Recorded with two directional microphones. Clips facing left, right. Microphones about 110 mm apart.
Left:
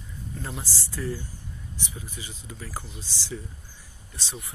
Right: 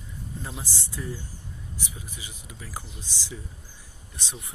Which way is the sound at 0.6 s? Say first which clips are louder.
Left 2 dB; 20° right (ahead or behind).